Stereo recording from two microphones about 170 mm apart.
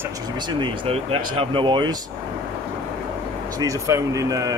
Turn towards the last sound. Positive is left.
turn(degrees=-20)  # may be behind; listen again after turning